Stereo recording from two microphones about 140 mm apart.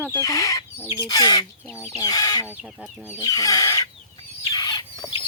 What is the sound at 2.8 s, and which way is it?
Speech, 5° right (ahead or behind).